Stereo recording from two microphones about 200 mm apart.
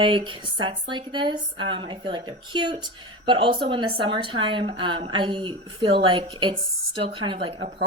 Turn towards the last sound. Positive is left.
turn(degrees=-25)  # may be behind; listen again after turning